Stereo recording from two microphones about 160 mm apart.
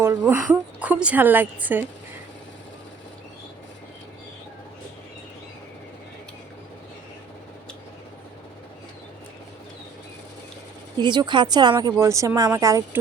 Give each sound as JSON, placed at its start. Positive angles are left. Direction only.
{"t": 0.2, "sound": "a woman's voice", "side_deg": -15}
{"t": 10.9, "sound": "speech", "side_deg": -30}